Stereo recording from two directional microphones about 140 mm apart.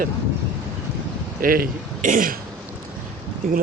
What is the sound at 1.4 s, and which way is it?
Speech, 90° right.